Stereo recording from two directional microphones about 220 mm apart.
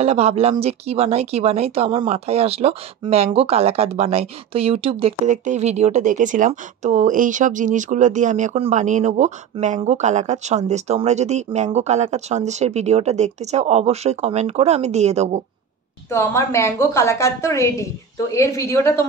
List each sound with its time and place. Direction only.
0.0 s speech: 30° right (ahead or behind)
16.1 s a woman's voice: 10° left (ahead or behind)